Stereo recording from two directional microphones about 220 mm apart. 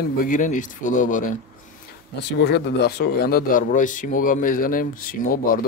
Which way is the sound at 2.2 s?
50° left (ahead or behind).